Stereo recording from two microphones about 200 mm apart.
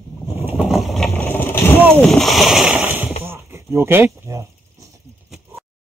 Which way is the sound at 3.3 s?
15° right (ahead or behind).